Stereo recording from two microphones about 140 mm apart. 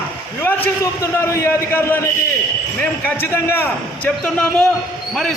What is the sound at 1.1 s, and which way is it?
A man's voice, 15° left (ahead or behind).